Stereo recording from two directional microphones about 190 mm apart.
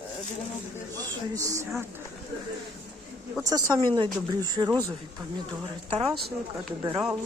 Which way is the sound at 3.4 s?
20° right (ahead or behind).